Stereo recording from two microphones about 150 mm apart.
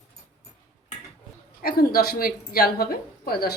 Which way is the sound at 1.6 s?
90° left.